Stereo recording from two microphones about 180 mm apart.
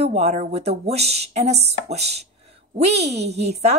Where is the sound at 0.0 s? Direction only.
35° right (ahead or behind).